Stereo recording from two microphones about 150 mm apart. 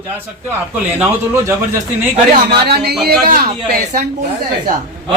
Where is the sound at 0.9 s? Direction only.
15° right (ahead or behind).